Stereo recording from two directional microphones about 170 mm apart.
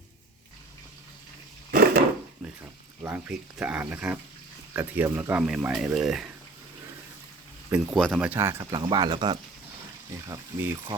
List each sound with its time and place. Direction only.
1.7 s dog: 65° right (ahead or behind)
2.4 s speech: 15° right (ahead or behind)
7.7 s speech: 5° right (ahead or behind)